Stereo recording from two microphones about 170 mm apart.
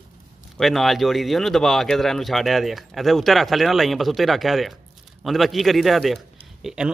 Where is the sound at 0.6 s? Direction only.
Centre (ahead or behind).